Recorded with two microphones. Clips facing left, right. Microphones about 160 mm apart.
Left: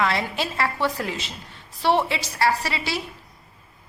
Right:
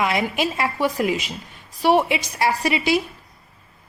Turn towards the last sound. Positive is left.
turn(degrees=-15)  # may be behind; listen again after turning